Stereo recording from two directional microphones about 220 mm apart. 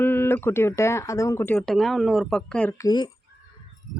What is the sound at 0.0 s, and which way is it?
A woman's voice, 10° left (ahead or behind).